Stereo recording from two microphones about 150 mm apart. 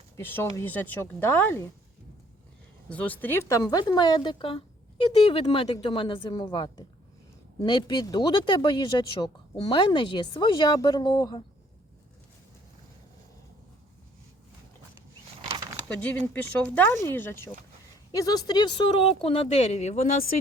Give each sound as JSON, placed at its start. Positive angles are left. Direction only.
{"t": 0.2, "sound": "speech", "side_deg": 15}
{"t": 2.9, "sound": "a woman's voice", "side_deg": 10}
{"t": 15.4, "sound": "a sound", "side_deg": -35}
{"t": 15.9, "sound": "speech", "side_deg": 10}